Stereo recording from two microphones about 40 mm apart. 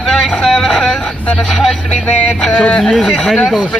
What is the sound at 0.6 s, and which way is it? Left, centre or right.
Speech, centre.